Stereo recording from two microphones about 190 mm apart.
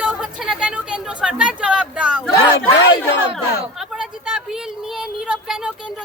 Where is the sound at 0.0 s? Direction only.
5° right (ahead or behind).